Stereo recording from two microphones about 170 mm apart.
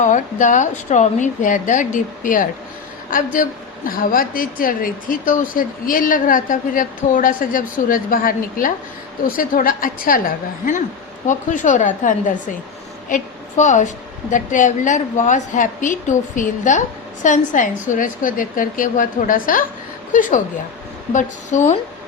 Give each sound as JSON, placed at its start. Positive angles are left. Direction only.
{"t": 0.0, "sound": "a woman's voice", "side_deg": 45}